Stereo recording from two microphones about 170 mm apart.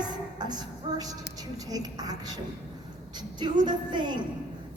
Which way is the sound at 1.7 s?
20° right (ahead or behind).